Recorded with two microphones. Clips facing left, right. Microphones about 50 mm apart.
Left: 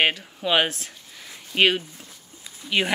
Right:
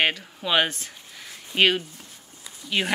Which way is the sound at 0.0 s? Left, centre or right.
Centre.